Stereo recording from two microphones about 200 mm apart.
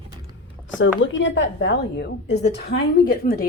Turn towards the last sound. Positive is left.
turn(degrees=50)  # may be behind; listen again after turning